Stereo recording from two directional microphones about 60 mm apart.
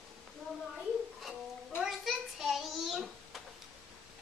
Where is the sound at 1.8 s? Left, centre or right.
Centre.